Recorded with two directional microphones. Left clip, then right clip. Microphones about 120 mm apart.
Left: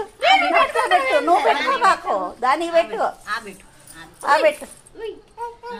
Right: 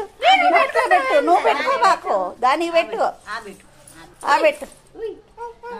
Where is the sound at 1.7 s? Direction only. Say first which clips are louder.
Right 1 dB; 20° right (ahead or behind).